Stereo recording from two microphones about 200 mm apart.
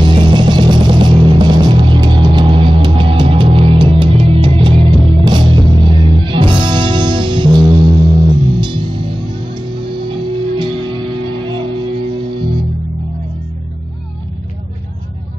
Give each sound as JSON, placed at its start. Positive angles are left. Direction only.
{"t": 0.0, "sound": "music", "side_deg": -25}